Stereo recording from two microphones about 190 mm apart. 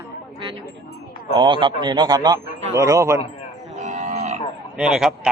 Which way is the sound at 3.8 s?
40° right (ahead or behind).